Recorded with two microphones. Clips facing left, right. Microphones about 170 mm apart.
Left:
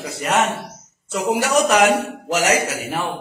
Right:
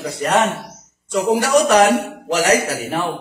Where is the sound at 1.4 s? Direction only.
35° right (ahead or behind).